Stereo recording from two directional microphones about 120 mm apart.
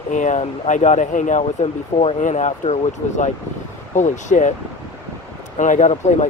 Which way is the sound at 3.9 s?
90° left.